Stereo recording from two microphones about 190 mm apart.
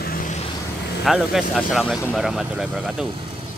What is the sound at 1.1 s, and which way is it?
Speech, centre (ahead or behind).